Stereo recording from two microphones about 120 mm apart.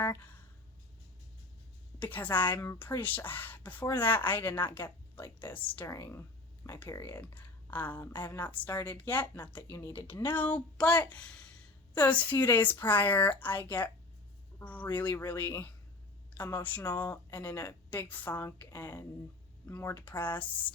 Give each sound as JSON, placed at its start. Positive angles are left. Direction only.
{"t": 0.0, "sound": "speech", "side_deg": 20}
{"t": 2.0, "sound": "speech", "side_deg": 15}